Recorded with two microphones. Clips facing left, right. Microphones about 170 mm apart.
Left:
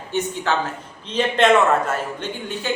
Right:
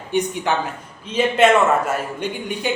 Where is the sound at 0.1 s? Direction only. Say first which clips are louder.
Right 2 dB; 15° right (ahead or behind).